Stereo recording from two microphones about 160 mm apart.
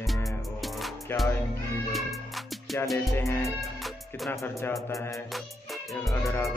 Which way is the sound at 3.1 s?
20° left (ahead or behind).